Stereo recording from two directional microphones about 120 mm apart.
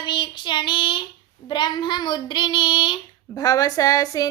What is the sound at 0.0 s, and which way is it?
Child singing, 40° left (ahead or behind).